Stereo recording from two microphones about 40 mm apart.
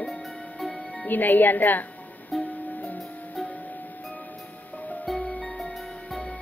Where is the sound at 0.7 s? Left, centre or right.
Left.